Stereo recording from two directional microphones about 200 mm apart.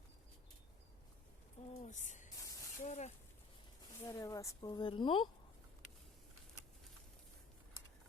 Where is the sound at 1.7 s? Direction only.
35° left (ahead or behind).